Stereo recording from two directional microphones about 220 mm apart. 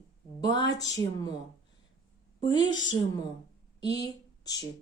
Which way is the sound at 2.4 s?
20° left (ahead or behind).